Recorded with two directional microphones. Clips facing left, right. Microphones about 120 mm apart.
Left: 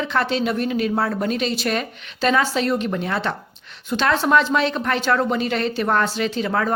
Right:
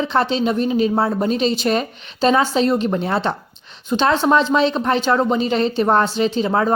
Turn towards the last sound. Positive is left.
turn(degrees=-25)  # may be behind; listen again after turning